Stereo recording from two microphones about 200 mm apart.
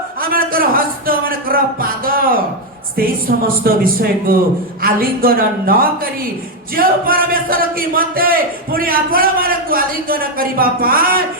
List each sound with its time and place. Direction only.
0.2 s a sound: 45° right (ahead or behind)
3.0 s a man's voice: 45° right (ahead or behind)
4.8 s a man's voice: 45° right (ahead or behind)